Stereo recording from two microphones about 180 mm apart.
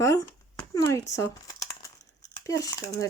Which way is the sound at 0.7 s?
20° left (ahead or behind).